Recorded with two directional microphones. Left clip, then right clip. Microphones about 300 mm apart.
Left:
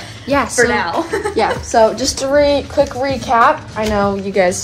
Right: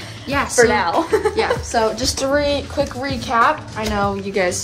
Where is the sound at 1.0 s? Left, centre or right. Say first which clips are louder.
Right 2 dB; right.